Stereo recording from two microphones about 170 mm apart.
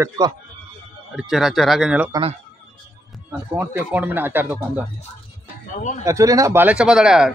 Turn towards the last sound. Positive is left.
turn(degrees=-5)  # may be behind; listen again after turning